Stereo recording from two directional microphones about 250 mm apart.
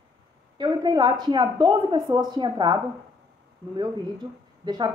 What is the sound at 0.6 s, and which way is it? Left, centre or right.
Speech, centre.